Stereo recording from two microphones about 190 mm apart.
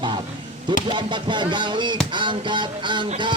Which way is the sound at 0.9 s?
25° right (ahead or behind).